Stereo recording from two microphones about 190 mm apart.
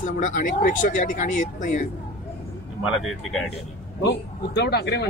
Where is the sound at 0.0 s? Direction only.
40° left (ahead or behind).